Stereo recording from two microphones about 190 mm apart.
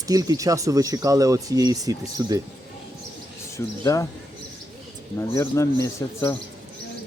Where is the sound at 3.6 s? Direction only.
15° left (ahead or behind).